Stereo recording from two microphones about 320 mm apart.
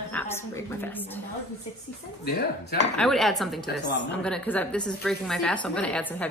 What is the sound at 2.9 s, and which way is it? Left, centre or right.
A woman's voice, centre.